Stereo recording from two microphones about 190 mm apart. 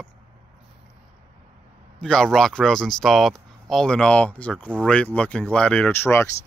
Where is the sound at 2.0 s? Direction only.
Centre (ahead or behind).